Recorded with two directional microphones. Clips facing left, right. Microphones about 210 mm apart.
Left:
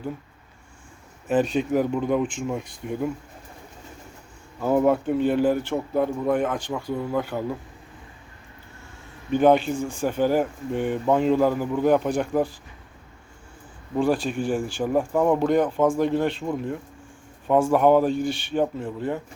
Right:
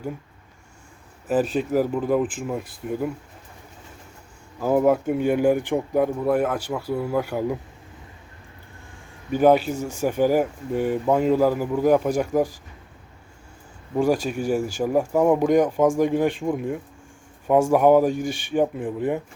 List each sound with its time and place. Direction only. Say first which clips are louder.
1.3 s speech: even; 5° right (ahead or behind)
4.6 s speech: right 1 dB; 5° right (ahead or behind)
9.3 s speech: right 1 dB; 5° right (ahead or behind)
13.9 s speech: right 1 dB; 10° right (ahead or behind)
18.1 s speech: left 1 dB; 45° right (ahead or behind)
18.5 s speech: right 4 dB; 15° right (ahead or behind)